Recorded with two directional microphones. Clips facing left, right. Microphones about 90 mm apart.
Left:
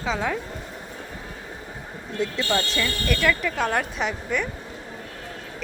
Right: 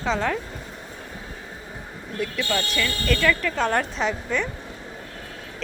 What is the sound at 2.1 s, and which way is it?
Speech, 25° left (ahead or behind).